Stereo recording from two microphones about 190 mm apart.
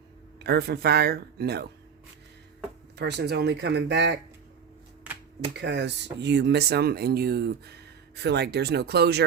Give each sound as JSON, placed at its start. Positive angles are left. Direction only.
{"t": 0.3, "sound": "speech", "side_deg": -60}
{"t": 3.0, "sound": "speech", "side_deg": -60}
{"t": 5.5, "sound": "speech", "side_deg": -65}